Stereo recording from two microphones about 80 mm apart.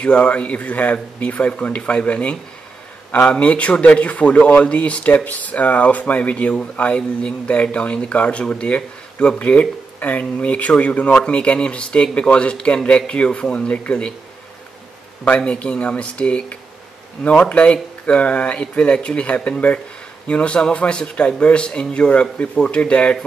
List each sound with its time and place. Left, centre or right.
0.0 s speech: centre
15.2 s speech: centre